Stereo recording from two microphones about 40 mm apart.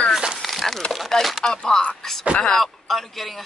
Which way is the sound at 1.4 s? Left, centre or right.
Centre.